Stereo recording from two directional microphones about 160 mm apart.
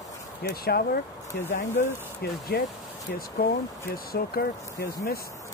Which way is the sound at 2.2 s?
80° left.